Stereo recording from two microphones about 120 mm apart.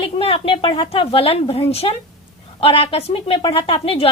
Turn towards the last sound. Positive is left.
turn(degrees=50)  # may be behind; listen again after turning